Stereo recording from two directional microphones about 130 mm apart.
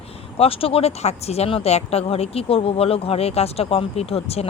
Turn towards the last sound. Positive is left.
turn(degrees=50)  # may be behind; listen again after turning